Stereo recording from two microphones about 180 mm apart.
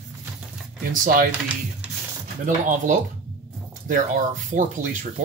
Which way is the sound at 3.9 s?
45° right (ahead or behind).